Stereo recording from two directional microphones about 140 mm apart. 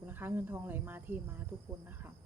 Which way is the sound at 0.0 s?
15° right (ahead or behind).